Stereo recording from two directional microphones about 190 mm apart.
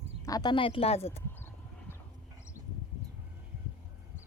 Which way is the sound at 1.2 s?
10° left (ahead or behind).